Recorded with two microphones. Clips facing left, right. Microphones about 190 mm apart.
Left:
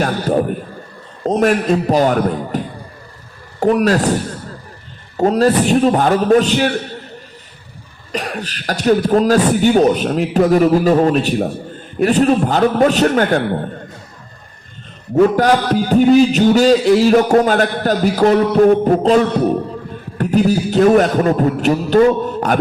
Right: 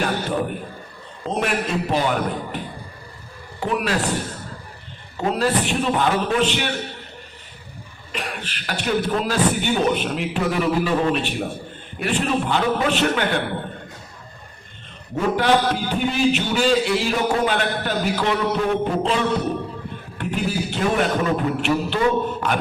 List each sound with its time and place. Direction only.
0.0 s a sound: 45° left (ahead or behind)
1.2 s a man's voice: 40° left (ahead or behind)
3.6 s a man's voice: 40° left (ahead or behind)
5.1 s a man's voice: 40° left (ahead or behind)
8.1 s a man's voice: 40° left (ahead or behind)
15.1 s a man's voice: 40° left (ahead or behind)